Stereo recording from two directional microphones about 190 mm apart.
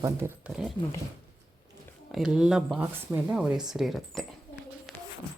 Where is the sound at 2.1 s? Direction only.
5° right (ahead or behind).